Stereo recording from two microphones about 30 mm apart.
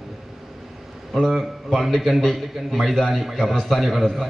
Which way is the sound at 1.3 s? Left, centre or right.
Centre.